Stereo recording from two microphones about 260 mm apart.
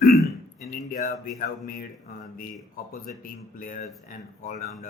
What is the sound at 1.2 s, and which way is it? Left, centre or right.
Speech, left.